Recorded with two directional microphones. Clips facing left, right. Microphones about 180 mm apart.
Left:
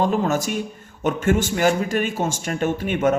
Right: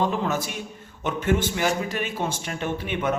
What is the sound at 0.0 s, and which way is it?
Speech, 45° left (ahead or behind).